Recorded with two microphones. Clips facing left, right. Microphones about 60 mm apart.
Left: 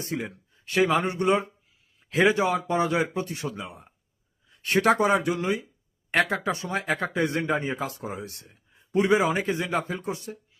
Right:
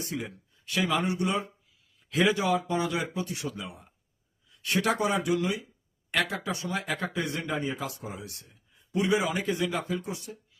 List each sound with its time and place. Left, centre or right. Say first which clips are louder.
0.0 s speech: left 3 dB; left